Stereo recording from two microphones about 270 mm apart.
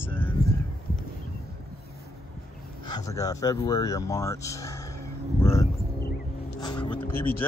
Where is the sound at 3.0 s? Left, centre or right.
Centre.